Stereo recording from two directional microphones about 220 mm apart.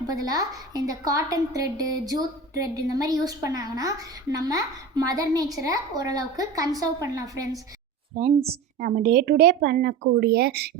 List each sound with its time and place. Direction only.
0.2 s a woman's voice: 15° right (ahead or behind)
8.4 s a woman's voice: 40° right (ahead or behind)